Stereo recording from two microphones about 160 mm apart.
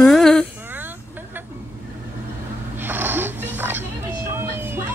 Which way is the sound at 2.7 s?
10° right (ahead or behind).